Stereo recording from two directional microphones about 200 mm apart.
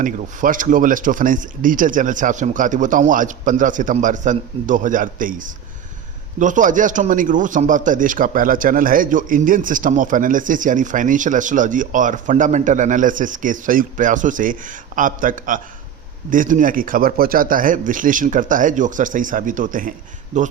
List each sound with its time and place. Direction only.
0.0 s a man's voice: 40° right (ahead or behind)